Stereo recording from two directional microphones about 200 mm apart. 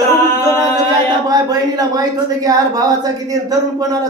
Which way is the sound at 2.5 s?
20° right (ahead or behind).